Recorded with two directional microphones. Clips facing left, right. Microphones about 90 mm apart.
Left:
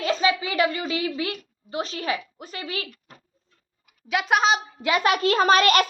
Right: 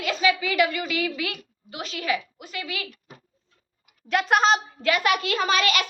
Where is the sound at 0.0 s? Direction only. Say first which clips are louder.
Left 1 dB; 35° left (ahead or behind).